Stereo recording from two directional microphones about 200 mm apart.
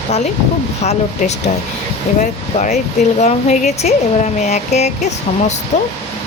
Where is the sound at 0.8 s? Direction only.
35° left (ahead or behind).